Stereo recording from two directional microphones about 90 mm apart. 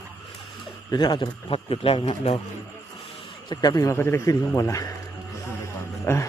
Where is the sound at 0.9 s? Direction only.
55° left (ahead or behind); by 2.0 s 90° left.